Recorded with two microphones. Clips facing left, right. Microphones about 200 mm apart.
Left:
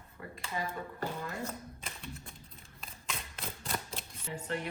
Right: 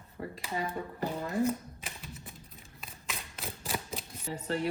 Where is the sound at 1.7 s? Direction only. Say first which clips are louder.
Even; 5° right (ahead or behind).